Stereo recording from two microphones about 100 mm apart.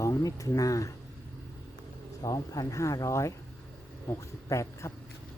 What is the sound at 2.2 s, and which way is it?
Speech, 35° left (ahead or behind).